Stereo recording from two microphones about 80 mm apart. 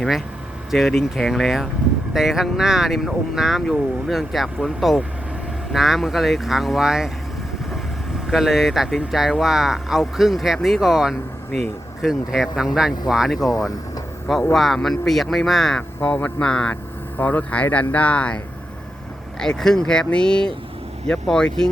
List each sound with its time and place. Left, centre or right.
0.7 s speech: centre
8.3 s speech: centre
14.5 s speech: centre
16.0 s speech: centre
19.4 s speech: centre